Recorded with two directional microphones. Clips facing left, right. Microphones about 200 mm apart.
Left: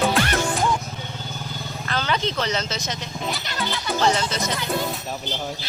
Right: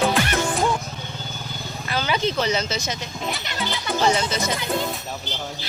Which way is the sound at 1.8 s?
5° right (ahead or behind).